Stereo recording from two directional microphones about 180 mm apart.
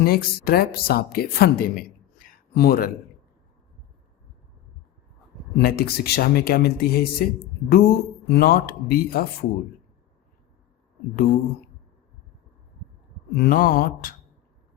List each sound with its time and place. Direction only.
0.0 s a woman's voice: 55° left (ahead or behind)
5.5 s speech: 60° left (ahead or behind)
13.3 s a sound: 55° left (ahead or behind)